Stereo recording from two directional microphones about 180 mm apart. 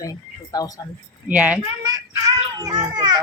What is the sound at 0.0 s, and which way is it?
Speech, 20° left (ahead or behind).